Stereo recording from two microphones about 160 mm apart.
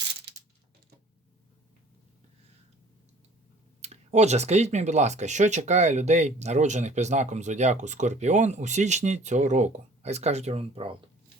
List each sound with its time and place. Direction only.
3.8 s speech: 45° right (ahead or behind)